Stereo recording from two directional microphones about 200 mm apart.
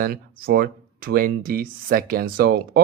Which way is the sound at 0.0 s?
50° right (ahead or behind).